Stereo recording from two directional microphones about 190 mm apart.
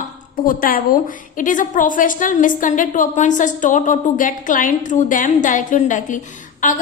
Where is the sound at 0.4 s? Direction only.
50° left (ahead or behind).